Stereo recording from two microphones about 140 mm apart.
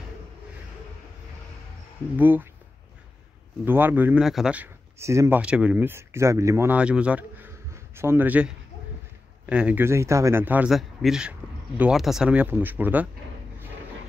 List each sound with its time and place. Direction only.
2.1 s speech: 15° right (ahead or behind)
3.6 s speech: 15° right (ahead or behind)
4.2 s speech: 5° right (ahead or behind)
4.9 s speech: 20° right (ahead or behind)
5.4 s speech: 10° right (ahead or behind)
10.7 s speech: centre (ahead or behind)